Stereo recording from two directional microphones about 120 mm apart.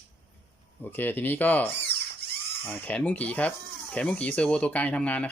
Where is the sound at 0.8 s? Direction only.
15° left (ahead or behind).